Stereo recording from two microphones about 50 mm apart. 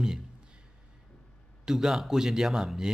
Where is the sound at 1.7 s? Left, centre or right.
Centre.